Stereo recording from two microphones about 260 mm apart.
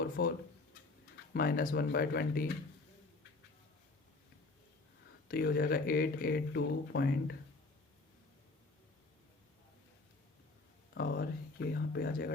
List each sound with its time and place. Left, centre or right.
0.0 s a sound: left
1.3 s speech: left
5.3 s speech: left
10.9 s speech: left